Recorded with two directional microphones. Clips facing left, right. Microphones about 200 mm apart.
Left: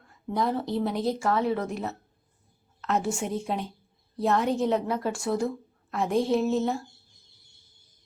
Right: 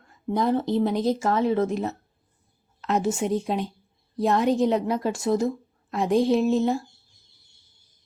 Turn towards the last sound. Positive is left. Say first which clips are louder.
# right 3 dB
turn(degrees=-15)  # may be behind; listen again after turning